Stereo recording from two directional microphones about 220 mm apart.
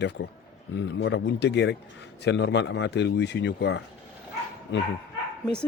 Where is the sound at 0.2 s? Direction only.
50° left (ahead or behind).